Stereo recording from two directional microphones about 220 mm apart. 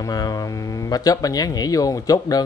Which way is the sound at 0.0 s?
15° left (ahead or behind).